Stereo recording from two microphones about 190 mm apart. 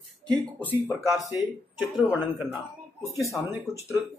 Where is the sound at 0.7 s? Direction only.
15° right (ahead or behind).